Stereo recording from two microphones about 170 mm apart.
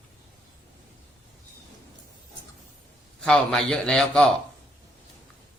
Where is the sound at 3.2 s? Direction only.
5° left (ahead or behind).